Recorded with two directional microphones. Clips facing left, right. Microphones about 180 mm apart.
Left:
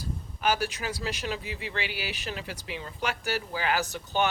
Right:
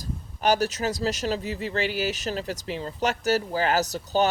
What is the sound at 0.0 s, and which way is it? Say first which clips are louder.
Speech: right 3 dB; 40° right (ahead or behind).